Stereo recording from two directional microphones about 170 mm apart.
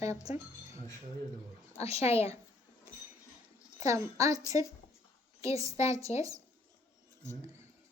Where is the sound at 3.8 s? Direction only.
20° right (ahead or behind).